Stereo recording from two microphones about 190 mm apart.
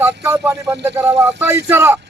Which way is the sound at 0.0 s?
15° right (ahead or behind).